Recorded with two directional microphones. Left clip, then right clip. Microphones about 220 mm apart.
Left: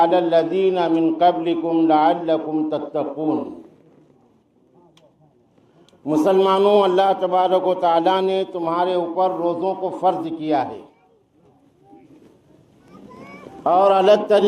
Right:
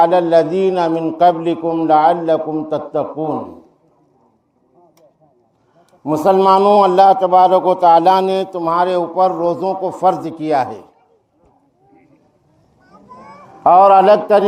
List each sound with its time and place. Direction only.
0.0 s a man's voice: 55° right (ahead or behind)
6.1 s a man's voice: 50° right (ahead or behind)
13.7 s a man's voice: 45° right (ahead or behind)